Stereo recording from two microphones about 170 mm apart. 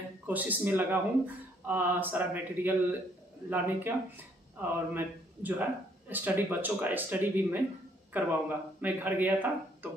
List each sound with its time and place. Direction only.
0.3 s speech: 10° right (ahead or behind)